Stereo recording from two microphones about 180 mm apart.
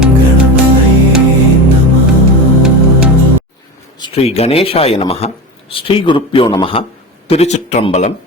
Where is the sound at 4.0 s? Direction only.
35° left (ahead or behind).